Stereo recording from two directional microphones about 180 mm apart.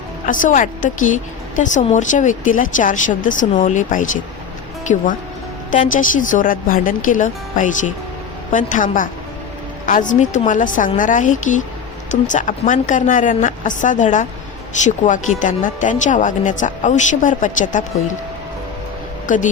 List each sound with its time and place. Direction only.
0.3 s a woman's voice: 45° left (ahead or behind)
19.3 s a woman's voice: 45° left (ahead or behind)